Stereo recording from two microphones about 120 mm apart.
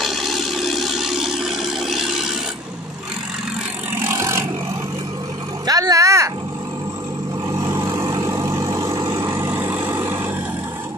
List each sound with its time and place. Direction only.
0.0 s toilet flush: centre (ahead or behind)
4.0 s vehicle: 25° right (ahead or behind)
5.7 s roar: 30° right (ahead or behind)
7.4 s vehicle: 25° right (ahead or behind)